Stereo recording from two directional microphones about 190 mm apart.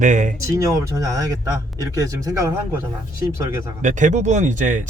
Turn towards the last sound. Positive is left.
turn(degrees=-40)  # may be behind; listen again after turning